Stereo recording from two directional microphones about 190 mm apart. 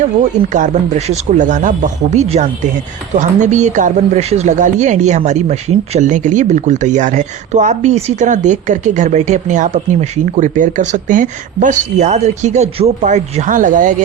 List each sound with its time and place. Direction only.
0.2 s speech: 40° right (ahead or behind)